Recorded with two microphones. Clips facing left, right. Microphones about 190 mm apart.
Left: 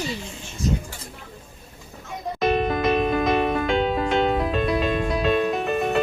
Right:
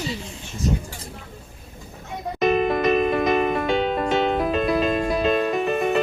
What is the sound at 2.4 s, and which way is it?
Music, centre (ahead or behind).